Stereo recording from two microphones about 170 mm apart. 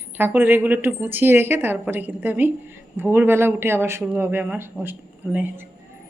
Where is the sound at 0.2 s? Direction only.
10° right (ahead or behind).